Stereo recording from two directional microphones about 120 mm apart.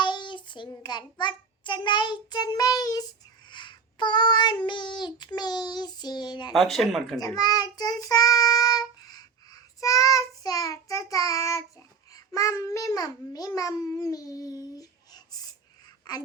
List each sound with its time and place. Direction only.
0.0 s child singing: 40° left (ahead or behind)
6.5 s speech: 5° left (ahead or behind)
7.3 s child singing: 35° left (ahead or behind)
12.1 s a child's voice: 30° left (ahead or behind)